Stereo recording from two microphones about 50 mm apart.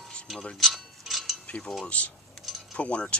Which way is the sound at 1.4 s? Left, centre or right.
Left.